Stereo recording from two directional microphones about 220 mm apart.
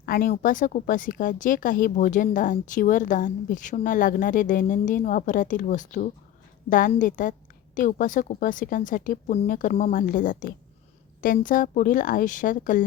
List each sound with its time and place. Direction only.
0.0 s speech: 40° left (ahead or behind)